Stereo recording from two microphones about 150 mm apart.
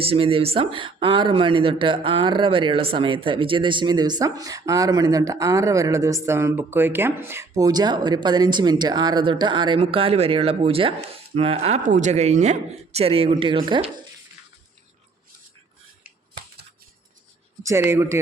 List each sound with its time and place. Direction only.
0.0 s speech: 40° right (ahead or behind)
17.6 s speech: 20° right (ahead or behind)